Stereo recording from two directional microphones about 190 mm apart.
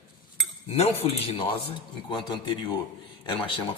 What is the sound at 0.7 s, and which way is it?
A man's voice, 30° left (ahead or behind).